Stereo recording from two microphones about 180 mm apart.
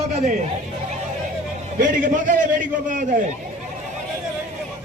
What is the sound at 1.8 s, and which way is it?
A man's voice, 45° right (ahead or behind).